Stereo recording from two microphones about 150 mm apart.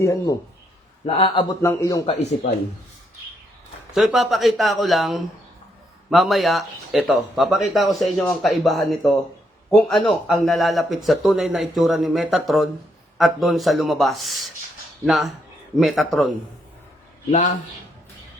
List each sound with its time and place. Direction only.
0.0 s a man's voice: 20° left (ahead or behind)
1.0 s speech: 35° left (ahead or behind)
1.6 s a man's voice: 20° left (ahead or behind)
2.0 s speech: 45° left (ahead or behind)
3.9 s speech: centre (ahead or behind)